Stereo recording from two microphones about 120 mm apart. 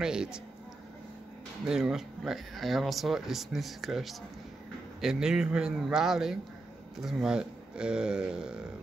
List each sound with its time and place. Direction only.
0.0 s speech: 5° right (ahead or behind)
1.7 s speech: 5° right (ahead or behind)